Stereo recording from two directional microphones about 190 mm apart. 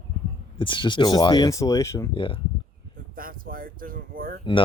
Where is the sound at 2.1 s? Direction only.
25° left (ahead or behind).